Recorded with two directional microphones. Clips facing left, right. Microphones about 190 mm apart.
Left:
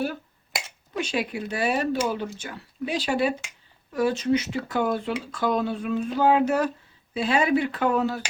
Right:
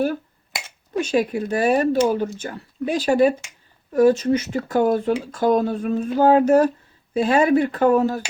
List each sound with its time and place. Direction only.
0.9 s speech: 45° right (ahead or behind)